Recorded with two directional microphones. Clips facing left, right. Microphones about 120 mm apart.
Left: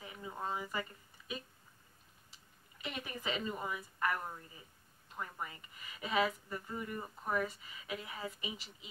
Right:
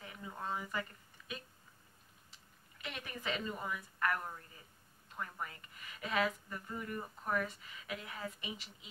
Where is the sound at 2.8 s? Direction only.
10° left (ahead or behind).